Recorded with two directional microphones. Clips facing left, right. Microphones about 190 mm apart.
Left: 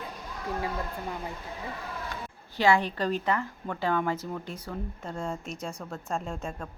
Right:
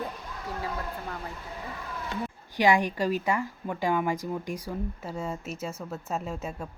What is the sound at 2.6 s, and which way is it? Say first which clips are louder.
A woman's voice: right 1 dB; 15° right (ahead or behind).